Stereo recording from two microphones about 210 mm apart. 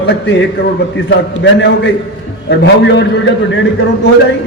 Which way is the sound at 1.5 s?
60° left (ahead or behind).